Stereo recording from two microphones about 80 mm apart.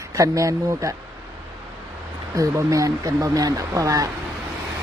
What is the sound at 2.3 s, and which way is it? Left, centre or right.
Speech, right.